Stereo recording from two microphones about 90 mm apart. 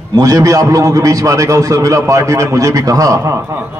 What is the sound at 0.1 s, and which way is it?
A man's voice, 40° right (ahead or behind).